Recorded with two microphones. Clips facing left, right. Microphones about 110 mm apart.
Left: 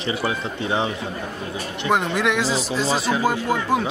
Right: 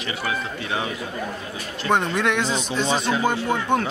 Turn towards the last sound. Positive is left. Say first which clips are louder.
# left 1 dB
turn(degrees=5)  # may be behind; listen again after turning